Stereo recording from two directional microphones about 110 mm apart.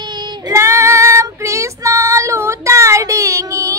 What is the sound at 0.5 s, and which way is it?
Female singing, 25° right (ahead or behind).